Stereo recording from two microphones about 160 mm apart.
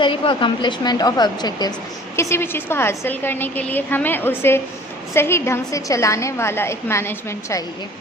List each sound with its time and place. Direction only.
0.0 s speech: 30° left (ahead or behind)
2.1 s a woman's voice: 15° left (ahead or behind)